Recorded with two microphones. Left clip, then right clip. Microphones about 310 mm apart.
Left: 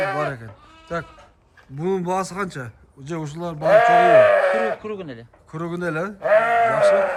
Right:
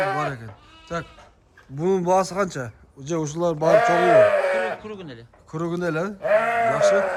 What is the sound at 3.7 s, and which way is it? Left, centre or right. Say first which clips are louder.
Speech: left 4 dB; centre.